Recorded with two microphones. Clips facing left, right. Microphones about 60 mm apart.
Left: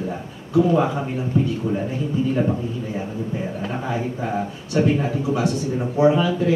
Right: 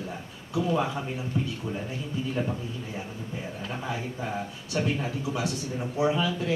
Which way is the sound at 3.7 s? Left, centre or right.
Left.